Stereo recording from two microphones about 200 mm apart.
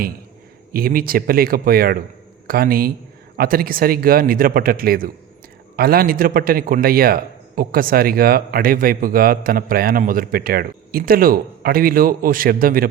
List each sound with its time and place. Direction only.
0.7 s a man's voice: 45° right (ahead or behind)